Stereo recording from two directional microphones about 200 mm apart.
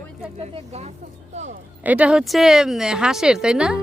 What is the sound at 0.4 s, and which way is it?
Speech, 35° right (ahead or behind).